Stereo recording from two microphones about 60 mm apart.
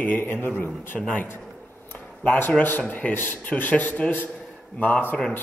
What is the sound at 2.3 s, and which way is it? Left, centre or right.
A man's voice, left.